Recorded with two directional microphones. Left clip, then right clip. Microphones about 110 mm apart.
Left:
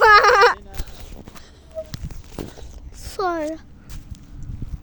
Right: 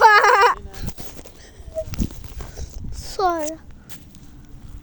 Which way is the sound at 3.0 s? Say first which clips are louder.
Right 3 dB; 10° right (ahead or behind).